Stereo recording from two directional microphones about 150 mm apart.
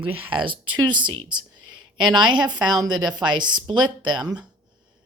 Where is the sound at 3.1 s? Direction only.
30° right (ahead or behind).